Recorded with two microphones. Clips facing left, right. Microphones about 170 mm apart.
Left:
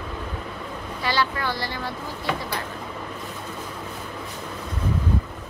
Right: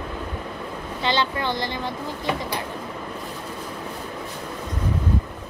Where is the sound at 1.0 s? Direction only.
20° right (ahead or behind).